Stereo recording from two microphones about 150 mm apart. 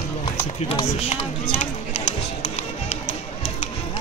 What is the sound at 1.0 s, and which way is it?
Music, 45° left (ahead or behind).